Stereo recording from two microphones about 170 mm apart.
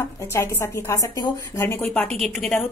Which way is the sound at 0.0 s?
15° left (ahead or behind).